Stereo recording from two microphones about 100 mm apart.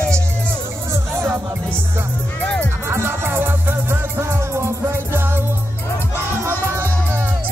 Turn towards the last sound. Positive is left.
turn(degrees=-25)  # may be behind; listen again after turning